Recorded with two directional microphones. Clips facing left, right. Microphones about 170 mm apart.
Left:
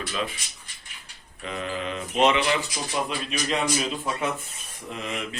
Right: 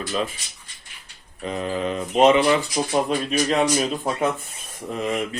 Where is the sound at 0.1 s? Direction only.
40° right (ahead or behind).